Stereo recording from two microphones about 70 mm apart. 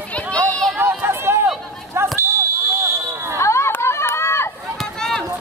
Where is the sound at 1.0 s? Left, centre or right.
Right.